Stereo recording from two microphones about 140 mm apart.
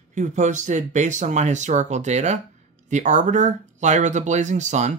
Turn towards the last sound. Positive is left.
turn(degrees=-55)  # may be behind; listen again after turning